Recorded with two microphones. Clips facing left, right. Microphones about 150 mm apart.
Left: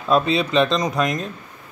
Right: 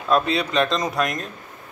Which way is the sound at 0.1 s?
Centre (ahead or behind).